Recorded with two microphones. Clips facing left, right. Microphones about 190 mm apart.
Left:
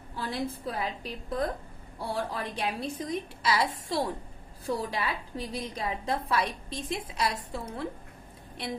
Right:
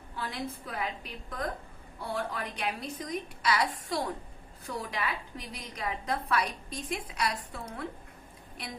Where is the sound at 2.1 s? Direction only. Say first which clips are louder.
Left 2 dB; 30° left (ahead or behind).